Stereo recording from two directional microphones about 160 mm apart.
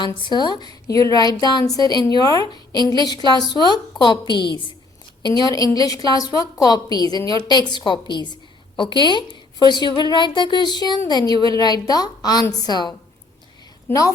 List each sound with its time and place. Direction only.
0.2 s a woman's voice: 25° left (ahead or behind)